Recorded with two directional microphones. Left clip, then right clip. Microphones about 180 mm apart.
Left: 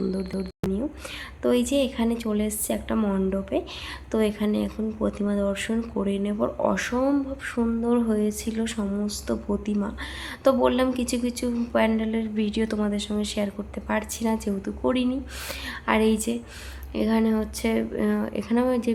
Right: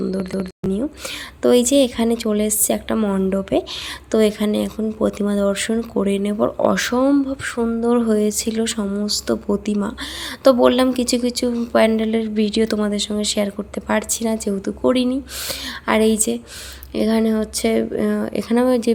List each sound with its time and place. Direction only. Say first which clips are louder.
0.3 s a woman's voice: right 6 dB; 25° right (ahead or behind)